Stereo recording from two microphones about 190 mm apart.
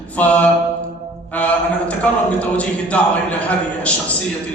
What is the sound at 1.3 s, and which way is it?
A man's voice, 5° left (ahead or behind).